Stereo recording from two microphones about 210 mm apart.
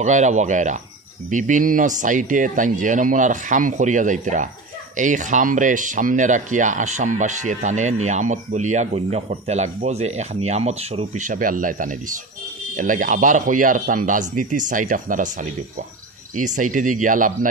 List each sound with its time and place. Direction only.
0.0 s speech: 35° right (ahead or behind)